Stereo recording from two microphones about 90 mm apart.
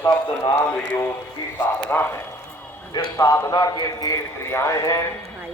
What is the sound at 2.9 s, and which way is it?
A man's voice, 40° left (ahead or behind).